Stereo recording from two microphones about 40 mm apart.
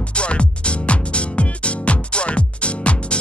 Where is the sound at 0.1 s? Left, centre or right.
Left.